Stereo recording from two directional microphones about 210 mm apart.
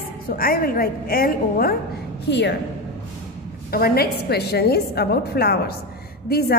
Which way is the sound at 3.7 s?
45° left (ahead or behind).